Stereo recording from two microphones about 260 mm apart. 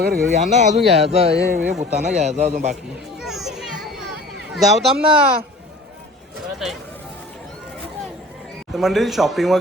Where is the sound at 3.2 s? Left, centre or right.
Centre.